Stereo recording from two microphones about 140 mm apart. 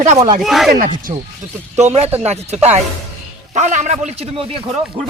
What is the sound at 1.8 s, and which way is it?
Speech, 50° right (ahead or behind).